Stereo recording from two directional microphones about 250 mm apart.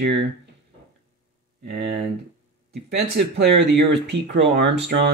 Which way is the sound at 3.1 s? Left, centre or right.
Right.